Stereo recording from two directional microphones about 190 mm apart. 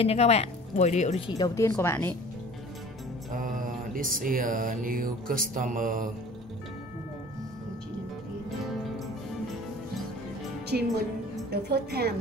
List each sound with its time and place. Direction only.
0.0 s speech: 30° left (ahead or behind)
1.3 s speech: 20° left (ahead or behind)
3.3 s mantra: 45° right (ahead or behind)
10.7 s a woman's voice: 50° right (ahead or behind)